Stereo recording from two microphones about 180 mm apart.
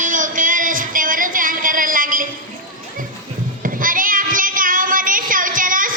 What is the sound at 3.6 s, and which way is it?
Child singing, 50° right (ahead or behind).